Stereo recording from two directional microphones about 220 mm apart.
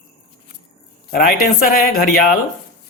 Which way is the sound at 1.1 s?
40° left (ahead or behind).